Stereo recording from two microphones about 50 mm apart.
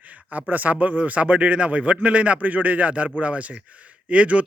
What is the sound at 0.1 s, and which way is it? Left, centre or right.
Speech, right.